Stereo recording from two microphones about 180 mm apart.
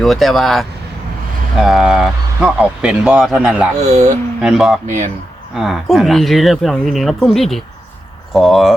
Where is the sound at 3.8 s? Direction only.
40° right (ahead or behind).